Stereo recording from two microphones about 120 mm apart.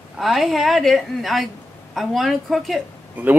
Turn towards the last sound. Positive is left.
turn(degrees=-10)  # may be behind; listen again after turning